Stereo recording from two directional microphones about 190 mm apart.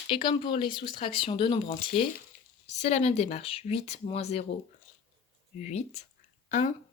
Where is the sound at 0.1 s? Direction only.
25° left (ahead or behind).